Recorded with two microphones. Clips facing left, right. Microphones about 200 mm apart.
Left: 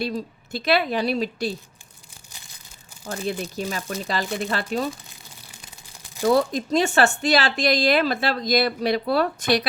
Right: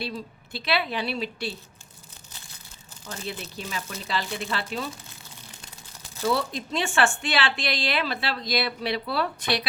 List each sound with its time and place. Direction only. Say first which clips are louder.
0.0 s speech: left 6 dB; 45° left (ahead or behind)
3.5 s speech: left 6 dB; 45° left (ahead or behind)
6.2 s speech: left 7 dB; 45° left (ahead or behind)